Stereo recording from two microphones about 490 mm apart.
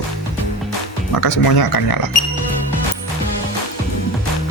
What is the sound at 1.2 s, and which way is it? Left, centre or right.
Speech, left.